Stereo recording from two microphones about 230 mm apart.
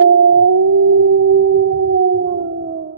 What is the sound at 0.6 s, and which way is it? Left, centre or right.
Howl, right.